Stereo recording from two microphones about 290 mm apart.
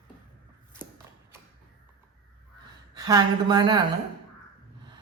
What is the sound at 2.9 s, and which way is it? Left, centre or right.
Speech, centre.